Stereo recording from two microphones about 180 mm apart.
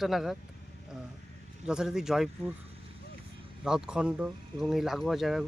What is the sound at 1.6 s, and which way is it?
Speech, 5° right (ahead or behind).